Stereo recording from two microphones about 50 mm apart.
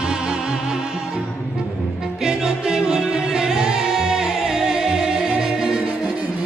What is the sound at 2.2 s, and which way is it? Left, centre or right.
Music, centre.